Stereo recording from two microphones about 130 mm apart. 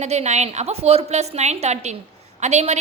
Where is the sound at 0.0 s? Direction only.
60° right (ahead or behind).